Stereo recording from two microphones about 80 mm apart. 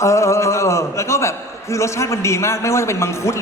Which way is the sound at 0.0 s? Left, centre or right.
Left.